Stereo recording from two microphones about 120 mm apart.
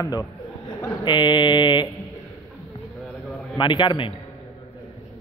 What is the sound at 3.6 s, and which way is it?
Speech, 40° left (ahead or behind).